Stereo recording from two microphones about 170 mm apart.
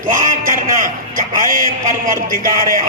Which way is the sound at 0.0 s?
55° right (ahead or behind).